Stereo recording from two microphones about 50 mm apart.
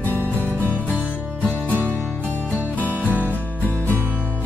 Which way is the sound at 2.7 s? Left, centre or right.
Left.